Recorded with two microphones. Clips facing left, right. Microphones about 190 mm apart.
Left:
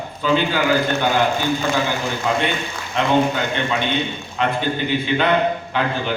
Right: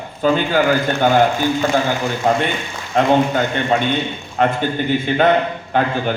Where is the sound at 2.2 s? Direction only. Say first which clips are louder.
Right 4 dB; 50° right (ahead or behind).